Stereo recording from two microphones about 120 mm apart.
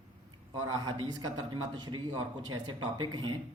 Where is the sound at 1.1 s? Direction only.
35° right (ahead or behind).